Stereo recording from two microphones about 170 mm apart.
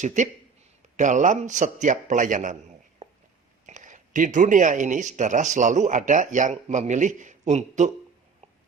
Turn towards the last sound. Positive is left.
turn(degrees=-45)  # may be behind; listen again after turning